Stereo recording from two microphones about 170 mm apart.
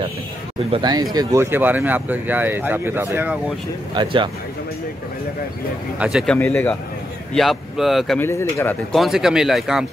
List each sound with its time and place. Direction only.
0.7 s speech: 25° right (ahead or behind); by 3.5 s 10° right (ahead or behind)
3.9 s speech: 30° right (ahead or behind)
5.9 s speech: 5° right (ahead or behind)
6.3 s speech: 10° left (ahead or behind)
7.3 s speech: centre (ahead or behind)
8.2 s speech: 15° left (ahead or behind)
8.9 s speech: centre (ahead or behind)